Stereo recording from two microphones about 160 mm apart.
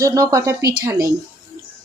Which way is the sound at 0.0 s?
20° right (ahead or behind).